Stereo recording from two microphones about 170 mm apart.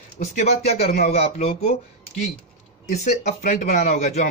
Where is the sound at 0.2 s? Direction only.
40° left (ahead or behind).